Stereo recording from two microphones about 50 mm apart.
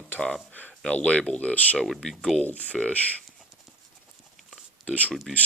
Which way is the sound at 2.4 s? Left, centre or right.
Left.